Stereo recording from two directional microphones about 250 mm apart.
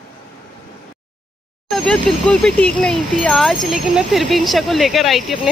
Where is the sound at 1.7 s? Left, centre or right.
Centre.